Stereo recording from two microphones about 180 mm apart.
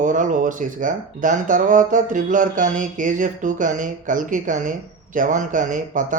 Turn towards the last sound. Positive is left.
turn(degrees=-45)  # may be behind; listen again after turning